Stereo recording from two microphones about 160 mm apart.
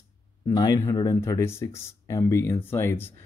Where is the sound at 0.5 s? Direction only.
20° left (ahead or behind).